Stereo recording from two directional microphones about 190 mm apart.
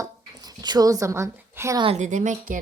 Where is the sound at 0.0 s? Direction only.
20° right (ahead or behind).